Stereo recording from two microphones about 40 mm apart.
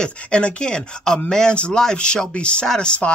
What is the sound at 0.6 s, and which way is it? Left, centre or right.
Speech, centre.